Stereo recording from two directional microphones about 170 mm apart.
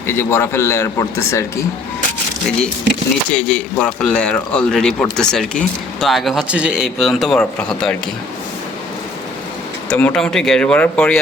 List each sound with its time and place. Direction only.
0.1 s a man's voice: 15° left (ahead or behind)
3.3 s speech: 5° left (ahead or behind)
9.9 s speech: 5° left (ahead or behind)